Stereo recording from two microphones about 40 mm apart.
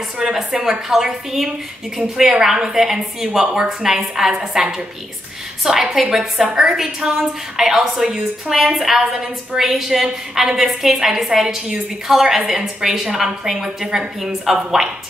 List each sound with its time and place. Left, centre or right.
0.2 s a woman's voice: centre